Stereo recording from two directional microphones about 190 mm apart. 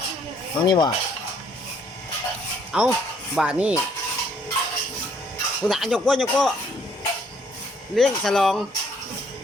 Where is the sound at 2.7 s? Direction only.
5° right (ahead or behind).